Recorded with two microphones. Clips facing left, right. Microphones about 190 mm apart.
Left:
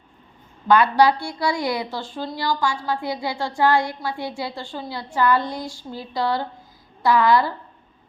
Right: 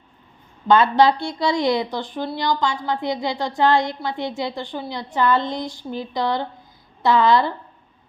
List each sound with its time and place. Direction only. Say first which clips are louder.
0.7 s a woman's voice: right 1 dB; 25° right (ahead or behind)